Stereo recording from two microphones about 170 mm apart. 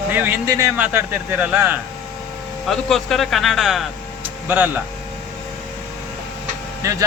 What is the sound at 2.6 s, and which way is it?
Speech, centre (ahead or behind).